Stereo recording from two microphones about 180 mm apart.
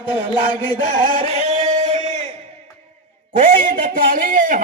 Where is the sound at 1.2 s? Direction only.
35° right (ahead or behind).